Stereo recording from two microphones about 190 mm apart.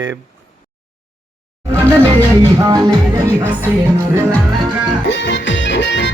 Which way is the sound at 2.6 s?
20° right (ahead or behind).